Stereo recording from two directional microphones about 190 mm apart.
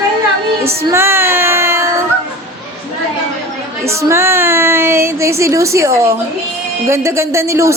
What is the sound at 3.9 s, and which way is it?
Speech, 15° right (ahead or behind).